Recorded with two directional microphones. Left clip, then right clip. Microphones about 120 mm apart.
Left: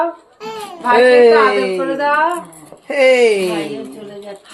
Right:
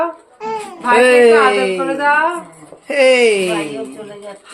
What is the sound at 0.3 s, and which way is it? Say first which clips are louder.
Speech: right 4 dB; 15° right (ahead or behind).